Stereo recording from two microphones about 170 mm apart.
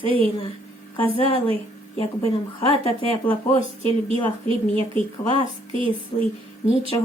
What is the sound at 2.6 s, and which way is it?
Speech, 35° left (ahead or behind).